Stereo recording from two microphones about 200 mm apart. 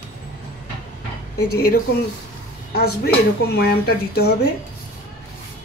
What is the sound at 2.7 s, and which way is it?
Speech, 50° left (ahead or behind).